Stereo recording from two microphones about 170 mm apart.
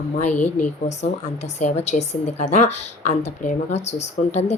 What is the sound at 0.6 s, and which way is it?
A woman's voice, 40° left (ahead or behind).